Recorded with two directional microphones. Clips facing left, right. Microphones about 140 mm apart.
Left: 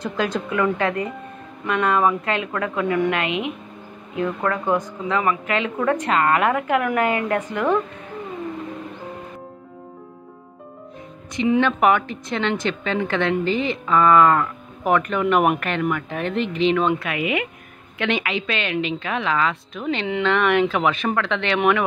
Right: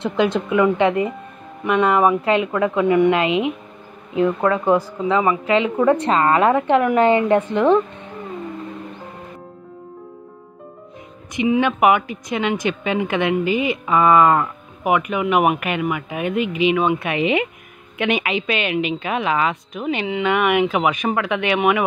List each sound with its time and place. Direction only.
0.0 s speech: 25° right (ahead or behind)
11.3 s a woman's voice: 10° right (ahead or behind)
17.0 s a woman's voice: 25° right (ahead or behind); by 21.8 s 10° right (ahead or behind)